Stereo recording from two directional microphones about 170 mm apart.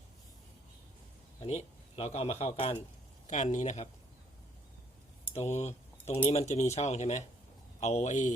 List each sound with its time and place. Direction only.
1.4 s a man's voice: 40° left (ahead or behind)
5.3 s speech: 40° left (ahead or behind)